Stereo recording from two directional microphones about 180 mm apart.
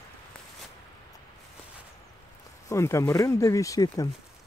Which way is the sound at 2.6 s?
15° left (ahead or behind).